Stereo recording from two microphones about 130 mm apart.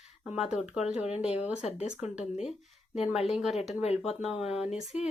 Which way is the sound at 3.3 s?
5° right (ahead or behind).